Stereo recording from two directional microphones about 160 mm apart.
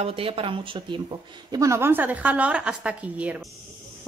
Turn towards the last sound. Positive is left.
turn(degrees=-10)  # may be behind; listen again after turning